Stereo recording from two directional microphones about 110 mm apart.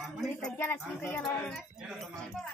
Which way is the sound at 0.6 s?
20° left (ahead or behind).